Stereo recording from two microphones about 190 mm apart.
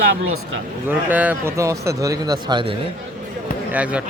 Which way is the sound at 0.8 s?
10° right (ahead or behind).